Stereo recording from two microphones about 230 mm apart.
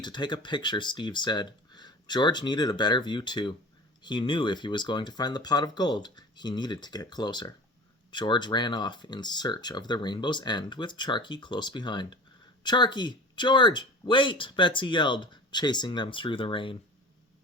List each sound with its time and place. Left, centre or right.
0.0 s speech: centre